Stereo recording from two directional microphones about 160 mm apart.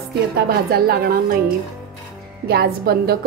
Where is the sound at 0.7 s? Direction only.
70° right (ahead or behind).